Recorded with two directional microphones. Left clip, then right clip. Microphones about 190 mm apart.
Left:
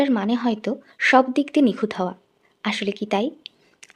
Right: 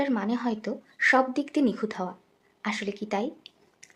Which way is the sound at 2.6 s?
35° left (ahead or behind).